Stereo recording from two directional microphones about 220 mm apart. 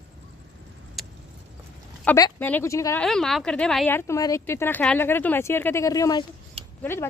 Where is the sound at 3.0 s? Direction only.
Centre (ahead or behind).